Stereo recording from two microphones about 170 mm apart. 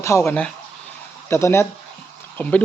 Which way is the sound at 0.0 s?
15° left (ahead or behind).